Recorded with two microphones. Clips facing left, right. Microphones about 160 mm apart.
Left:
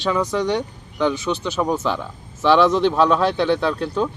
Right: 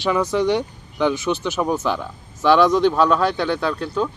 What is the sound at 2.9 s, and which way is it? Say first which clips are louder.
Speech: left 1 dB; 5° right (ahead or behind).